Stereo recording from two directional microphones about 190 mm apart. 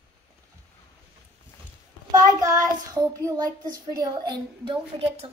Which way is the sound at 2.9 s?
15° right (ahead or behind).